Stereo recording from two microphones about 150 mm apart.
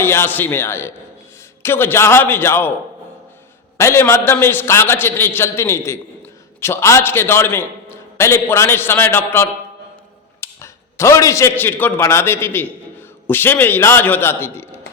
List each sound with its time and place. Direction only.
0.0 s a man's voice: 15° left (ahead or behind)
3.8 s a man's voice: 20° left (ahead or behind)